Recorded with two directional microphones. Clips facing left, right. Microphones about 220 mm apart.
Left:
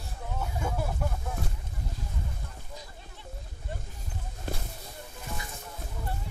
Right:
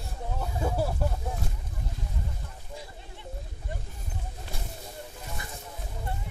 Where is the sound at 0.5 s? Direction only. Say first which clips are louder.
Right 4 dB; 35° right (ahead or behind).